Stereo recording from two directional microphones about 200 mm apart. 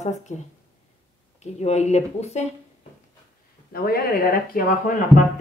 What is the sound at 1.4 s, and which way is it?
Speech, 35° left (ahead or behind).